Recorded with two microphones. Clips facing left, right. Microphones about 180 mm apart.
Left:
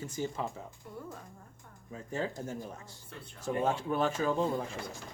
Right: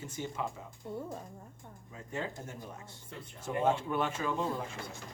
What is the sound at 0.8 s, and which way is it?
Speech, 25° right (ahead or behind).